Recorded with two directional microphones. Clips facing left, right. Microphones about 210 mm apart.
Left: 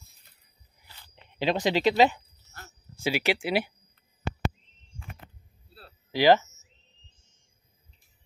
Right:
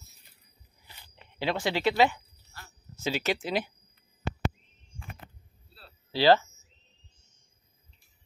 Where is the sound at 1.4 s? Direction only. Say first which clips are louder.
Left 4 dB; 20° left (ahead or behind).